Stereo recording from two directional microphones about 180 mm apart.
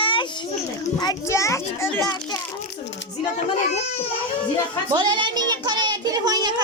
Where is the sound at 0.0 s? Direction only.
30° left (ahead or behind).